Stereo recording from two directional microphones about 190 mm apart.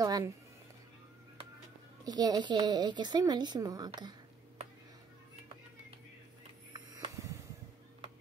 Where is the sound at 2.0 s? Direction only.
20° right (ahead or behind).